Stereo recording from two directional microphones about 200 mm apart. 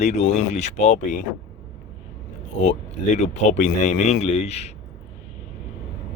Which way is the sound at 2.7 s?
35° left (ahead or behind).